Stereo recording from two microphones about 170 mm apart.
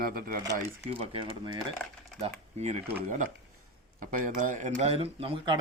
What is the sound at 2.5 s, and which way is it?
Speech, 40° right (ahead or behind).